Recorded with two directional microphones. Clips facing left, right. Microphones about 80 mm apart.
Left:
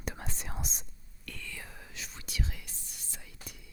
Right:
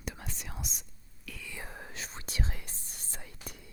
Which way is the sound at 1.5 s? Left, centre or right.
Right.